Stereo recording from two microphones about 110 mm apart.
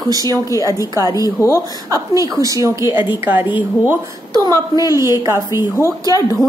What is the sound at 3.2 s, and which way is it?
Speech, 20° right (ahead or behind).